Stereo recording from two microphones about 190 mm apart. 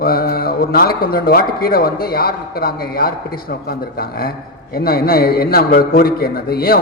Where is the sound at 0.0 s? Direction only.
50° left (ahead or behind).